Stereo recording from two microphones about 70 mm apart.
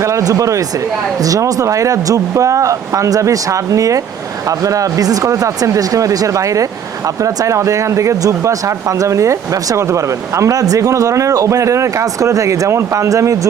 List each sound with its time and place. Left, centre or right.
0.0 s speech: right